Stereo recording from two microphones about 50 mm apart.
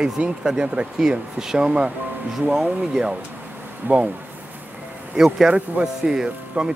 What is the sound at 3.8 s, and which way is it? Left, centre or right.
Speech, right.